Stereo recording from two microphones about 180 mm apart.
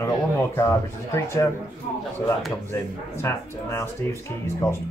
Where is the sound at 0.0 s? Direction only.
15° left (ahead or behind).